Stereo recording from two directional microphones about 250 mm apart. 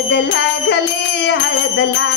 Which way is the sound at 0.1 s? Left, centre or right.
Left.